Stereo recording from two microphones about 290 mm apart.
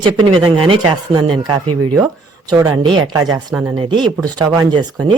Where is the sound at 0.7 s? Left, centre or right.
Centre.